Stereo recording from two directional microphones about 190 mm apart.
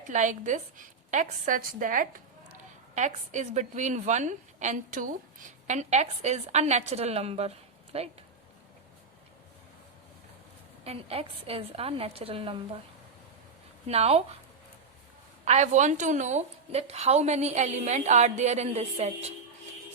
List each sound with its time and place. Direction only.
0.1 s a woman's voice: 40° right (ahead or behind)
10.8 s a woman's voice: 30° right (ahead or behind)
13.8 s a woman's voice: 35° right (ahead or behind)
15.4 s a woman's voice: 35° right (ahead or behind)